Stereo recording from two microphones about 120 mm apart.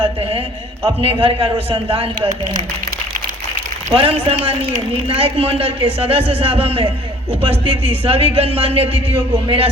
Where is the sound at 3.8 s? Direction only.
55° right (ahead or behind).